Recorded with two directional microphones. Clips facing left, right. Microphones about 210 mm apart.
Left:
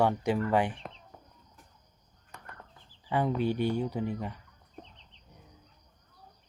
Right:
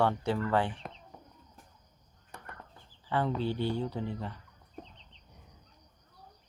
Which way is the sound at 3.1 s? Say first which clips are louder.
Left 3 dB; 15° left (ahead or behind).